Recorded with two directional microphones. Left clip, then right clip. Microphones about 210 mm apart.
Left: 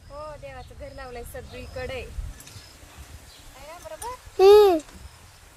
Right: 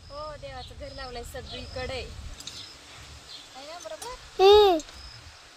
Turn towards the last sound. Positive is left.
turn(degrees=20)  # may be behind; listen again after turning